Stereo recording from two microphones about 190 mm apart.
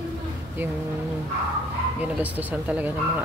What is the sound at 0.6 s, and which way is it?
Speech, 10° right (ahead or behind).